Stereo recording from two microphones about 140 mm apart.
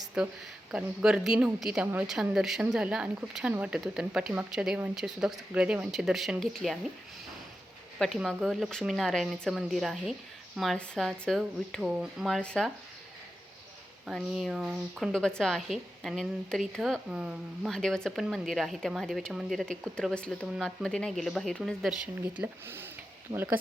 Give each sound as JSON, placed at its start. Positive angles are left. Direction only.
{"t": 0.2, "sound": "speech", "side_deg": -5}
{"t": 7.9, "sound": "speech", "side_deg": 0}
{"t": 14.1, "sound": "speech", "side_deg": 0}
{"t": 22.2, "sound": "speech", "side_deg": -15}